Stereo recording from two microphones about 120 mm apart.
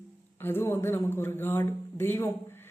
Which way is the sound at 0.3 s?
20° left (ahead or behind).